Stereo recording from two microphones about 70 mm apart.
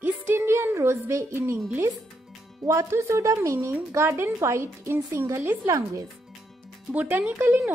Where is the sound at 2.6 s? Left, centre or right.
Right.